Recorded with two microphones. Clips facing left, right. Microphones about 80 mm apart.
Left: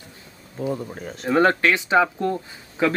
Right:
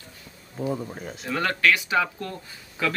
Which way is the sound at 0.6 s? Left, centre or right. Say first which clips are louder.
Left 2 dB; centre.